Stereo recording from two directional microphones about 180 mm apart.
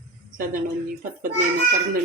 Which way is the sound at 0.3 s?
50° right (ahead or behind).